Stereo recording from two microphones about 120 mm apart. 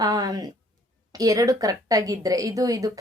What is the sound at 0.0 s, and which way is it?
A woman's voice, 30° right (ahead or behind).